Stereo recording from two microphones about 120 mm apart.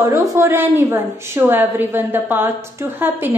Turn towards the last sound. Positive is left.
turn(degrees=-15)  # may be behind; listen again after turning